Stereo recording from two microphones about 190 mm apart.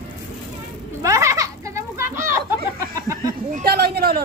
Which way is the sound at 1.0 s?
15° right (ahead or behind).